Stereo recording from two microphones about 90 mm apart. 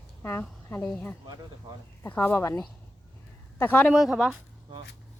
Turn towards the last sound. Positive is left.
turn(degrees=-5)  # may be behind; listen again after turning